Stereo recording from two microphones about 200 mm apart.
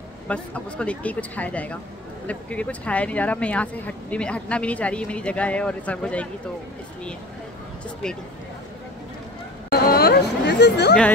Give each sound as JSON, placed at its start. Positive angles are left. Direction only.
{"t": 0.3, "sound": "speech", "side_deg": 5}
{"t": 9.7, "sound": "chatter", "side_deg": 50}